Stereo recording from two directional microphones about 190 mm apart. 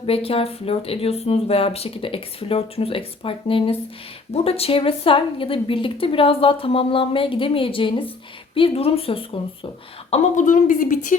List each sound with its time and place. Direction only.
0.0 s a woman's voice: 30° left (ahead or behind)
10.1 s speech: 40° left (ahead or behind)